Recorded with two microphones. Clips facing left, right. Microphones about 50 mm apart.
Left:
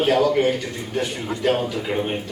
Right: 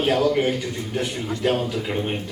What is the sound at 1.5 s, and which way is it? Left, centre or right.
Speech, centre.